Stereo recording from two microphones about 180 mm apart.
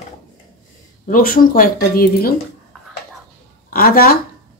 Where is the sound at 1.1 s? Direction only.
50° left (ahead or behind).